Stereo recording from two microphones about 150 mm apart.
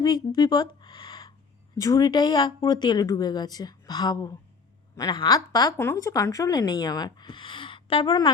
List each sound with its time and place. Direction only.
0.0 s a woman's voice: 30° left (ahead or behind)